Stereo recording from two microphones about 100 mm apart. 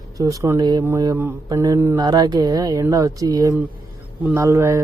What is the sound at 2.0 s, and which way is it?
Speech, 45° right (ahead or behind).